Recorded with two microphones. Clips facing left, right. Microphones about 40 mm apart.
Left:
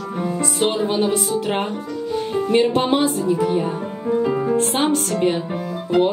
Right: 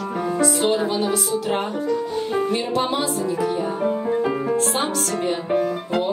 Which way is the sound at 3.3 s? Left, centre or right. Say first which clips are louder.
Left 3 dB; left.